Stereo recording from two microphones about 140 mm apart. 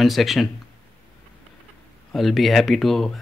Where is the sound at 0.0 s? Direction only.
Centre (ahead or behind).